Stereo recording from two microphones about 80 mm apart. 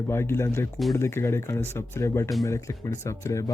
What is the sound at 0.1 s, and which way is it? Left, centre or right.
Speech, left.